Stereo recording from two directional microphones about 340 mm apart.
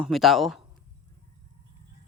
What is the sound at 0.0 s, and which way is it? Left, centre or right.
Speech, centre.